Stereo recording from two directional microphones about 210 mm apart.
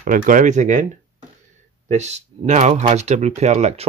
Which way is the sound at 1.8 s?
35° right (ahead or behind).